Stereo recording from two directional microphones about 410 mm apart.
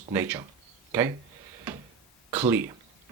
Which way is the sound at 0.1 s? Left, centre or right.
Centre.